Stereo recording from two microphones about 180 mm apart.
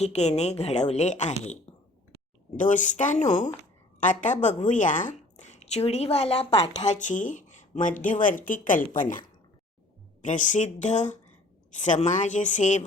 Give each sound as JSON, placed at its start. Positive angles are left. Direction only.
{"t": 0.0, "sound": "a woman's voice", "side_deg": 35}
{"t": 2.6, "sound": "a woman's voice", "side_deg": 45}